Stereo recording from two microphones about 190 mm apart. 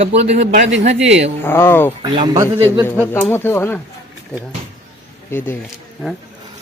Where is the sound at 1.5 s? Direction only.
10° left (ahead or behind).